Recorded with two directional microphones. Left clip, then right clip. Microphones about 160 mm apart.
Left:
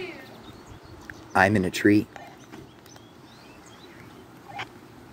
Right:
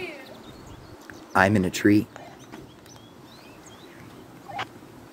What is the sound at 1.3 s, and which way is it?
Speech, centre (ahead or behind).